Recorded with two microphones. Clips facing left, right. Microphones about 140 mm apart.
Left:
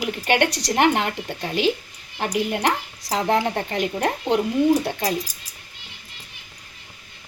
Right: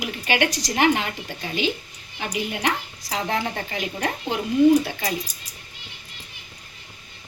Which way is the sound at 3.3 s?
30° left (ahead or behind).